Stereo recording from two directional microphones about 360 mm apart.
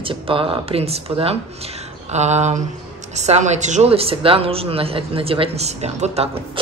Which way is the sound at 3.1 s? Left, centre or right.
Centre.